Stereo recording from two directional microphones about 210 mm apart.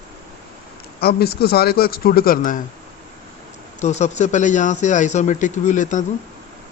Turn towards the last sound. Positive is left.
turn(degrees=35)  # may be behind; listen again after turning